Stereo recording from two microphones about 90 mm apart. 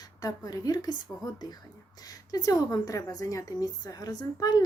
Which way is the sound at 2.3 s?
40° left (ahead or behind).